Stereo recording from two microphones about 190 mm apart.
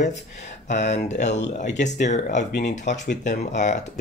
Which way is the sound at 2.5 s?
55° left (ahead or behind).